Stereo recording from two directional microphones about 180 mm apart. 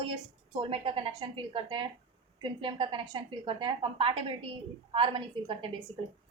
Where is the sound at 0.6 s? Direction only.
30° right (ahead or behind).